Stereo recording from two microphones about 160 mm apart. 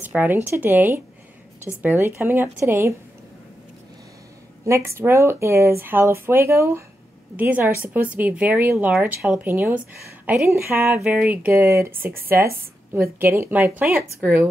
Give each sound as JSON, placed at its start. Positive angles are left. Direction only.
{"t": 0.0, "sound": "speech", "side_deg": -10}
{"t": 4.6, "sound": "speech", "side_deg": -15}
{"t": 10.9, "sound": "speech", "side_deg": -5}
{"t": 13.2, "sound": "speech", "side_deg": -15}